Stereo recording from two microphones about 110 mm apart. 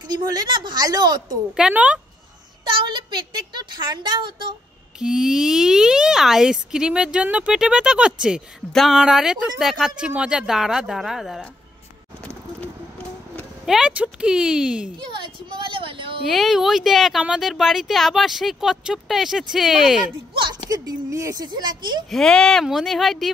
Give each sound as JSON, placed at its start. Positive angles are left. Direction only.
{"t": 0.0, "sound": "a woman's voice", "side_deg": -40}
{"t": 1.6, "sound": "speech", "side_deg": -10}
{"t": 2.6, "sound": "a woman's voice", "side_deg": -45}
{"t": 4.9, "sound": "speech", "side_deg": -5}
{"t": 13.7, "sound": "speech", "side_deg": -10}
{"t": 15.0, "sound": "a woman's voice", "side_deg": -50}
{"t": 16.3, "sound": "speech", "side_deg": 0}
{"t": 20.7, "sound": "a woman's voice", "side_deg": -30}
{"t": 21.5, "sound": "a woman's voice", "side_deg": -40}
{"t": 22.1, "sound": "speech", "side_deg": 5}